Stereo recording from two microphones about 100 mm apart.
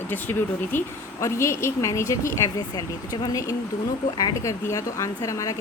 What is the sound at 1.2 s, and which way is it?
A woman's voice, 30° left (ahead or behind).